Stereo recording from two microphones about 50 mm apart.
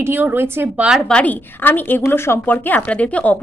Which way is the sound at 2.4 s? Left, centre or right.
Left.